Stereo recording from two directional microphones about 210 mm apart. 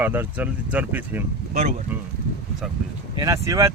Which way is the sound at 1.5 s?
35° right (ahead or behind).